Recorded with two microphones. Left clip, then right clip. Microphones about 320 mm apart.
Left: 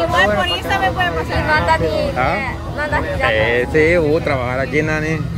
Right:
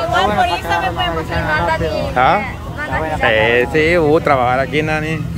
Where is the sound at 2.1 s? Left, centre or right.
Centre.